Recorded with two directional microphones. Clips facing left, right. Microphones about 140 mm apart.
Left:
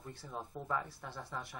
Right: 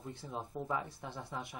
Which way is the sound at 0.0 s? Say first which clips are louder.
Right 2 dB; 20° right (ahead or behind).